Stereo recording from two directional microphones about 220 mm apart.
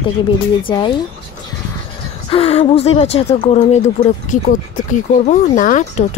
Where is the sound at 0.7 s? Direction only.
20° left (ahead or behind).